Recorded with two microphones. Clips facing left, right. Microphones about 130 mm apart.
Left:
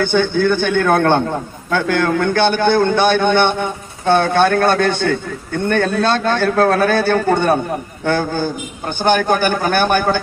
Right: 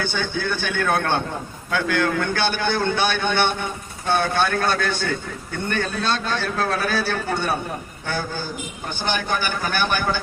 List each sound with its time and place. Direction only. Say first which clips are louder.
0.0 s a man's voice: left 10 dB; 55° left (ahead or behind)